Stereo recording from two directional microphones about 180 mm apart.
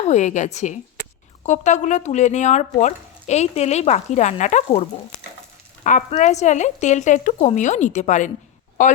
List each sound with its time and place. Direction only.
0.1 s speech: 40° left (ahead or behind)